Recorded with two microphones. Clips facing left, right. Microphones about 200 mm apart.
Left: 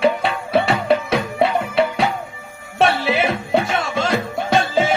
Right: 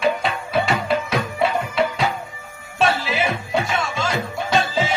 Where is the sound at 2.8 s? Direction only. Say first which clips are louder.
Left 3 dB; 60° left (ahead or behind).